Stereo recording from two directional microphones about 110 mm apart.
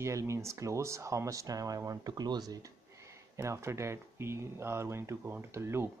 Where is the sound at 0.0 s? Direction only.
25° right (ahead or behind).